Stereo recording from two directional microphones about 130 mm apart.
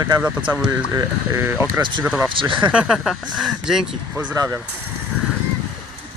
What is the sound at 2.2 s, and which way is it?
Speech, 40° right (ahead or behind).